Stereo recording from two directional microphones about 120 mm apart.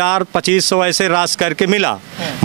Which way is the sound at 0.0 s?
20° right (ahead or behind).